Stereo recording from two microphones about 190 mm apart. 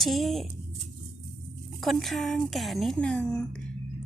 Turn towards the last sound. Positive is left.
turn(degrees=5)  # may be behind; listen again after turning